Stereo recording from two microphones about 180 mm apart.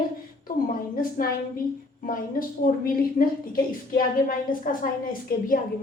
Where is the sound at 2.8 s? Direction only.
55° left (ahead or behind).